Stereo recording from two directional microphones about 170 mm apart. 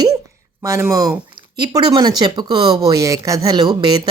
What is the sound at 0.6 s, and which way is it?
Speech, 15° right (ahead or behind).